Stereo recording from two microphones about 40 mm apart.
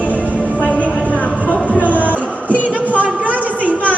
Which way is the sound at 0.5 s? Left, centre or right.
Left.